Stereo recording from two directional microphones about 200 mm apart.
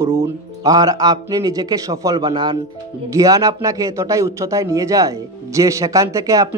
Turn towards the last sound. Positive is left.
turn(degrees=-15)  # may be behind; listen again after turning